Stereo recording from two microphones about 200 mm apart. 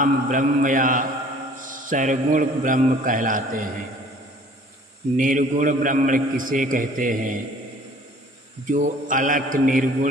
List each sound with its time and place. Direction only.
0.0 s a man's voice: 40° right (ahead or behind)
5.1 s a man's voice: 40° right (ahead or behind)
8.7 s a man's voice: 40° right (ahead or behind)